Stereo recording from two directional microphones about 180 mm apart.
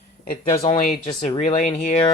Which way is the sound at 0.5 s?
35° left (ahead or behind).